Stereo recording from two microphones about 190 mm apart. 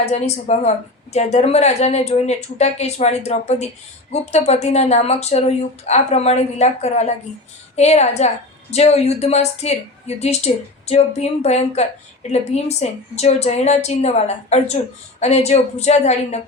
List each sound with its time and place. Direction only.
0.0 s speech: 35° left (ahead or behind)